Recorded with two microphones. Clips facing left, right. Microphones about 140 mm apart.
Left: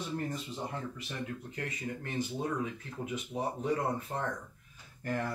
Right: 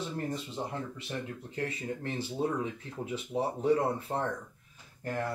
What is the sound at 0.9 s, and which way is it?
Speech, 30° right (ahead or behind).